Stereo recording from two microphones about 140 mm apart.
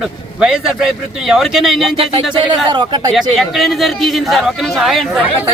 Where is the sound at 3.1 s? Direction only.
Centre (ahead or behind).